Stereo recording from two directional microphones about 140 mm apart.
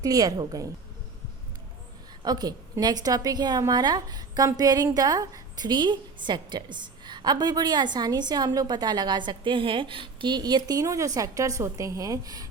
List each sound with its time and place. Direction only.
0.0 s a woman's voice: 25° right (ahead or behind)
2.2 s a woman's voice: 30° right (ahead or behind)